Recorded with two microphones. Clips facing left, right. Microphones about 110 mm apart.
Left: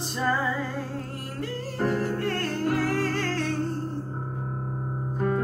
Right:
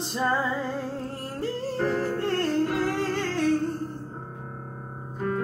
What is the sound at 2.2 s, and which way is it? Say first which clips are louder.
Music: right 4 dB; 25° right (ahead or behind).